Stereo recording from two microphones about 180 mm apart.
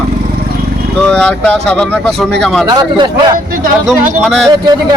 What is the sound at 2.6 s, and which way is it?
Speech, 25° right (ahead or behind).